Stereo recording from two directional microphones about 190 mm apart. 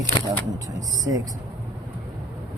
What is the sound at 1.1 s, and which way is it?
Speech, 15° right (ahead or behind).